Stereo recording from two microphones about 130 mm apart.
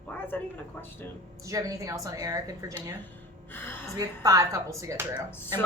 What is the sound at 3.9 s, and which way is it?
A woman's voice, 30° right (ahead or behind).